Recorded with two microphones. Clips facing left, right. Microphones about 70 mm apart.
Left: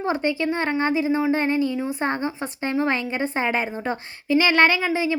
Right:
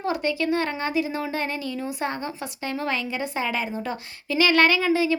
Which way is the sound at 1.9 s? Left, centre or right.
Left.